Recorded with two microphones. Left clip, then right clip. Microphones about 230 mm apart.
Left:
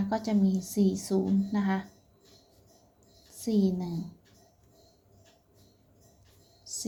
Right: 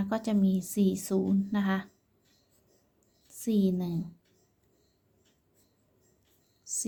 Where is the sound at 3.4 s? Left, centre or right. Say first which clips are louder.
Even; centre.